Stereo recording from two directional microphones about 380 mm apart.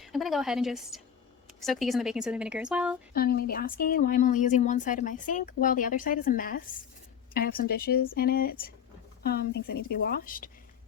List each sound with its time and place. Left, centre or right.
0.0 s a woman's voice: centre
3.1 s a woman's voice: left